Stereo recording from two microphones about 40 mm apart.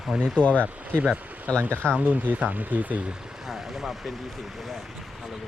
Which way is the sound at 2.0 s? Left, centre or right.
Right.